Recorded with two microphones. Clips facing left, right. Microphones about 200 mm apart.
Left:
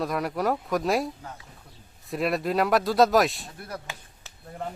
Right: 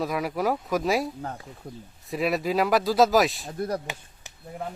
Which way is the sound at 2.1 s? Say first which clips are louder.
Right 1 dB; centre (ahead or behind).